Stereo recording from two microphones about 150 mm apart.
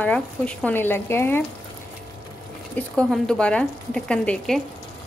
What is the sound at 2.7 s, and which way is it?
A woman's voice, 5° left (ahead or behind).